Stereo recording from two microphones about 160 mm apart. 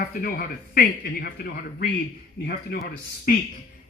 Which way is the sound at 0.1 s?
65° left (ahead or behind).